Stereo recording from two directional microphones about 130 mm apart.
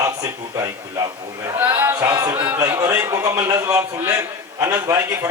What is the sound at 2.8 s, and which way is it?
A man's voice, 20° right (ahead or behind).